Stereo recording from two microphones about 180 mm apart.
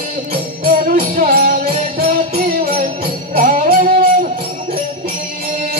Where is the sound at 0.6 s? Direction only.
50° right (ahead or behind).